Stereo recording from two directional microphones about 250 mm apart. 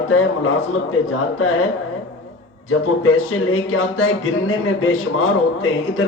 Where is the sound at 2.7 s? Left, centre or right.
Left.